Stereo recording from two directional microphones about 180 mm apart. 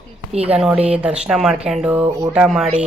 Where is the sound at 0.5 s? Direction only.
5° right (ahead or behind).